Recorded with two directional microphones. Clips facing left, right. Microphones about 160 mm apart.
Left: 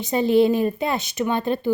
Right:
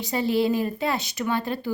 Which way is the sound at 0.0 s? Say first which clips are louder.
Left 6 dB; 20° left (ahead or behind).